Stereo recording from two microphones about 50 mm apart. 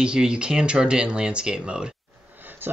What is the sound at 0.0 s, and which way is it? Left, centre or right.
Speech, centre.